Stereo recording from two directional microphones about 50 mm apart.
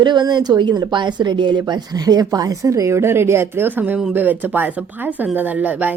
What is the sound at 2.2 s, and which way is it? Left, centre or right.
A woman's voice, right.